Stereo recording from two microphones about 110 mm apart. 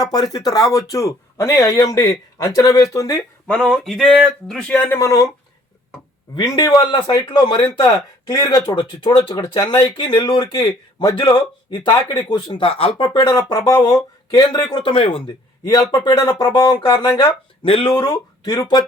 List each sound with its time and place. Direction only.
0.0 s speech: 35° left (ahead or behind)
3.4 s a sound: 5° left (ahead or behind)
4.7 s speech: 15° left (ahead or behind)
4.9 s speech: 30° left (ahead or behind)
6.3 s speech: 40° left (ahead or behind)
8.3 s speech: 30° left (ahead or behind)
12.5 s speech: 60° left (ahead or behind)
13.5 s speech: 35° left (ahead or behind); by 15.2 s 55° left (ahead or behind)
15.6 s speech: 35° left (ahead or behind)
17.6 s speech: 55° left (ahead or behind)
17.9 s speech: 40° left (ahead or behind)